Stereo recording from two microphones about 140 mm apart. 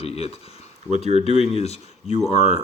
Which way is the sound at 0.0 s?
45° left (ahead or behind).